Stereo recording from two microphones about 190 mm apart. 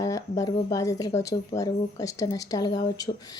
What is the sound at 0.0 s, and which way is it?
A woman's voice, 20° left (ahead or behind).